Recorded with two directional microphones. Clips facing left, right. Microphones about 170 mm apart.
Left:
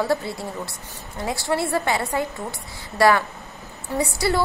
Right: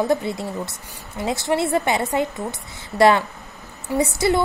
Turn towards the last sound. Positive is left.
turn(degrees=-20)  # may be behind; listen again after turning